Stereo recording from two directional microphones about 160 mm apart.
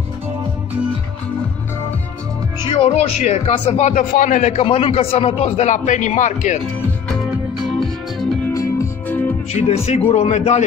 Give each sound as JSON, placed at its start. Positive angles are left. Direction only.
{"t": 2.7, "sound": "speech", "side_deg": 40}
{"t": 7.6, "sound": "music", "side_deg": 0}
{"t": 8.5, "sound": "music", "side_deg": 20}
{"t": 9.5, "sound": "speech", "side_deg": 40}